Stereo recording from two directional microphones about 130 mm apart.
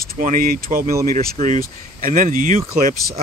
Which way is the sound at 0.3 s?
90° right.